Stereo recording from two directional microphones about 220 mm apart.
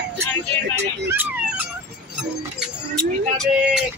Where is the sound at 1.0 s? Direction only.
10° right (ahead or behind).